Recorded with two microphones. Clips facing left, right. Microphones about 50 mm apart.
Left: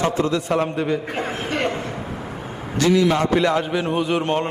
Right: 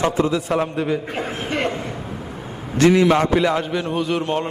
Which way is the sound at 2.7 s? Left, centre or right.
Right.